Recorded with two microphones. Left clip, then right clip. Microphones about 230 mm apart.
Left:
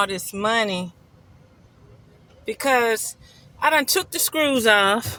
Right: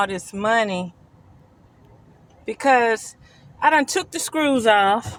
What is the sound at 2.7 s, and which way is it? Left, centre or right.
Speech, left.